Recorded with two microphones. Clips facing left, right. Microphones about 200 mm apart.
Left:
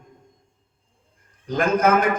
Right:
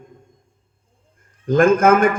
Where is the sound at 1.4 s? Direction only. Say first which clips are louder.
Right 6 dB; 50° right (ahead or behind).